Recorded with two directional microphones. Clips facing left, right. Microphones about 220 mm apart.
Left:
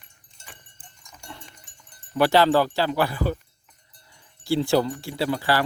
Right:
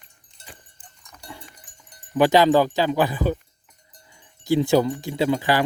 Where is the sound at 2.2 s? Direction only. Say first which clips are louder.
Right 2 dB; 15° right (ahead or behind).